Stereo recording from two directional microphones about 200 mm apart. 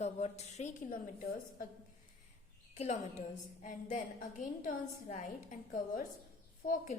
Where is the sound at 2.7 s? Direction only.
35° left (ahead or behind).